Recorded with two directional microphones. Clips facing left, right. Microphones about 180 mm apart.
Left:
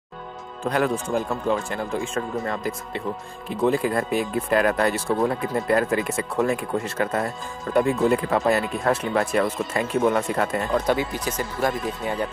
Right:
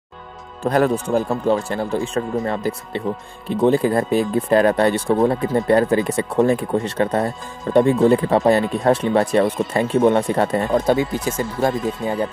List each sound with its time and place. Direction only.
0.7 s speech: 40° right (ahead or behind)